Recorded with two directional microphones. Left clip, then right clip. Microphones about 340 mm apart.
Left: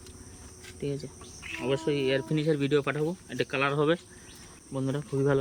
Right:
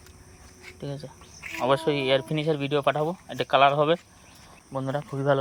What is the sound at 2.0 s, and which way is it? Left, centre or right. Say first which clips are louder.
Speech: right 4 dB; right.